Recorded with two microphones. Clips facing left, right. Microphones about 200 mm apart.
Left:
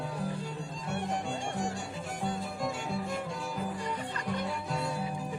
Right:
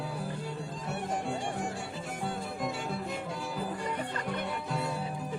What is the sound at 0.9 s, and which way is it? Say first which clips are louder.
Music: even; 5° right (ahead or behind).